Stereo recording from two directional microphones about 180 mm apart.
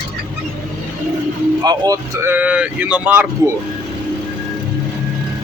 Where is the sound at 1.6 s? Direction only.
20° right (ahead or behind).